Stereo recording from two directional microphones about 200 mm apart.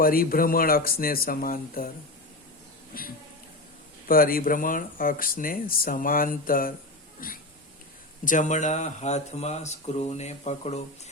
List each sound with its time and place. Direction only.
0.0 s speech: 45° left (ahead or behind)
4.1 s speech: 45° left (ahead or behind)